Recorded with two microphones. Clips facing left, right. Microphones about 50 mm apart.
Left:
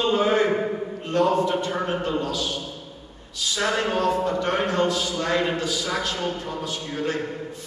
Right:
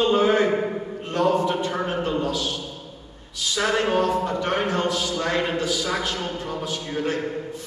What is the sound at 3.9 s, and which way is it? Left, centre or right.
Speech, right.